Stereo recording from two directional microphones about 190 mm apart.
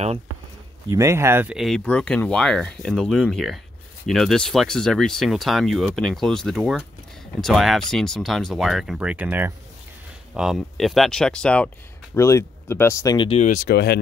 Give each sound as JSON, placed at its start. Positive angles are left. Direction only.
{"t": 0.8, "sound": "speech", "side_deg": -15}
{"t": 13.4, "sound": "speech", "side_deg": 40}
{"t": 13.7, "sound": "speech", "side_deg": 60}